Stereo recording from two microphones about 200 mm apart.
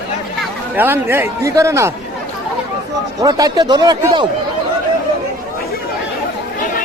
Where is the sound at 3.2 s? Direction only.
20° right (ahead or behind).